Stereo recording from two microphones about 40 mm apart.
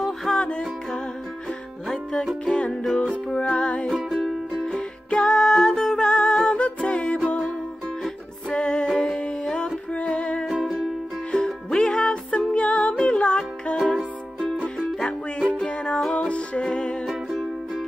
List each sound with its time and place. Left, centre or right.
0.0 s music: centre
0.4 s music: left
2.4 s music: left
2.7 s music: centre
3.3 s music: left
3.9 s music: centre
4.6 s music: left
8.9 s humming: left
9.2 s music: left
11.4 s music: centre
12.3 s music: left
15.0 s music: left
17.0 s music: centre